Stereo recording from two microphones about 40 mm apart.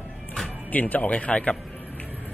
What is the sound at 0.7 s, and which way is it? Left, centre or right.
Speech, left.